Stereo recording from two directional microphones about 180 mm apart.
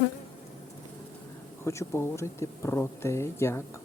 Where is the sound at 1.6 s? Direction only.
15° left (ahead or behind).